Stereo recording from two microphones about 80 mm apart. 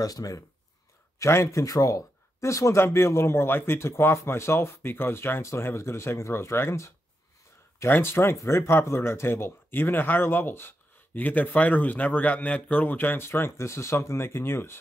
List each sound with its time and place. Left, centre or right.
0.0 s speech: left
1.2 s speech: left
7.9 s speech: left